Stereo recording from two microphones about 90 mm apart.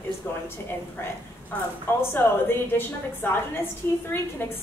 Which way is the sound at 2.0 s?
25° left (ahead or behind).